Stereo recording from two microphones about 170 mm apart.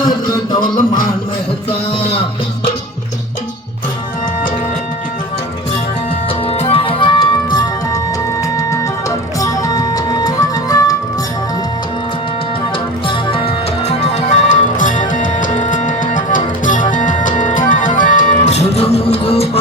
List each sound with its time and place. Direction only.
6.5 s music: 35° left (ahead or behind)
13.1 s music: 35° left (ahead or behind)